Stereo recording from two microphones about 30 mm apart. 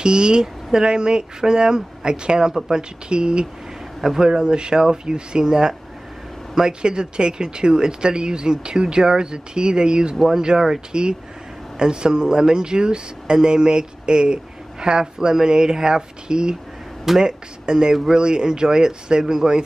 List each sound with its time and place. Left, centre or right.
0.0 s speech: right
10.1 s speech: centre
10.9 s speech: right